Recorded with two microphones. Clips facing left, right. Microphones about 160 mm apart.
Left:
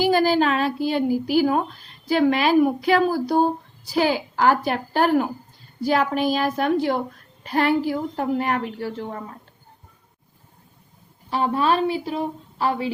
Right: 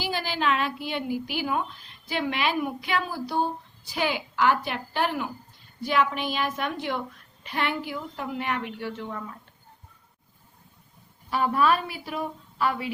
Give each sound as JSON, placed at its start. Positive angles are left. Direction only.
{"t": 0.0, "sound": "speech", "side_deg": 45}
{"t": 11.3, "sound": "a woman's voice", "side_deg": 30}